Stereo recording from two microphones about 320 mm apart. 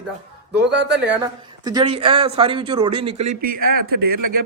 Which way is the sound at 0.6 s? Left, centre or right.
Right.